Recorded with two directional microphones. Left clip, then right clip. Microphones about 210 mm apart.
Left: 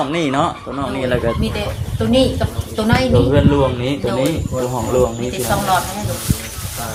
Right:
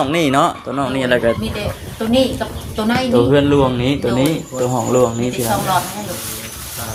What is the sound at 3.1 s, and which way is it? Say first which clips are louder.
Speech: right 5 dB; 55° right (ahead or behind).